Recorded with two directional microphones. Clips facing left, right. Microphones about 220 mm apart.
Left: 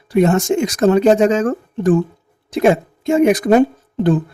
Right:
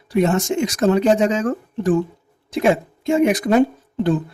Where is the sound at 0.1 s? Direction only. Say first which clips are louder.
Left 4 dB; 50° left (ahead or behind).